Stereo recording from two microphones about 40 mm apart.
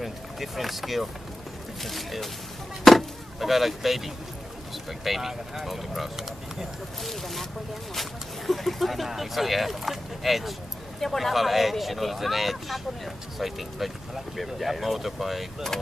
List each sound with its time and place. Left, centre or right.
0.0 s speech: centre
2.9 s chop: centre
3.4 s speech: centre
8.4 s speech: centre
15.7 s speech: centre